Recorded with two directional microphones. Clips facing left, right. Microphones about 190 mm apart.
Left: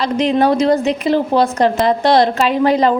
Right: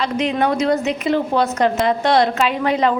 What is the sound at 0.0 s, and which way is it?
A woman's voice, 35° left (ahead or behind).